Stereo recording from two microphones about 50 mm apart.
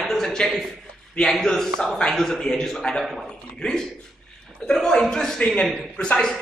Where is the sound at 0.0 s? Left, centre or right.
Centre.